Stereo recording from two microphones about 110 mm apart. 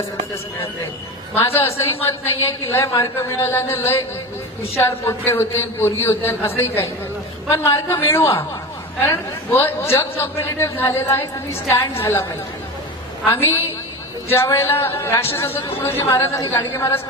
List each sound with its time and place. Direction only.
1.6 s a man's voice: 25° left (ahead or behind)
13.3 s a man's voice: 25° left (ahead or behind)
15.5 s speech: 60° left (ahead or behind)
15.8 s a man's voice: 25° left (ahead or behind)